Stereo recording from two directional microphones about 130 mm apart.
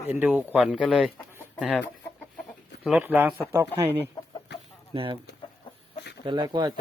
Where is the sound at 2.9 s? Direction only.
10° right (ahead or behind).